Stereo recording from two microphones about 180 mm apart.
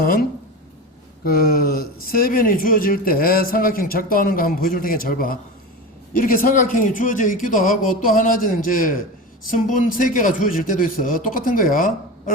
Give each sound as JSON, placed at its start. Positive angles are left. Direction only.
{"t": 0.0, "sound": "speech", "side_deg": 55}